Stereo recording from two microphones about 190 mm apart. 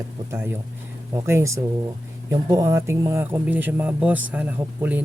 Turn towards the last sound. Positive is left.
turn(degrees=-10)  # may be behind; listen again after turning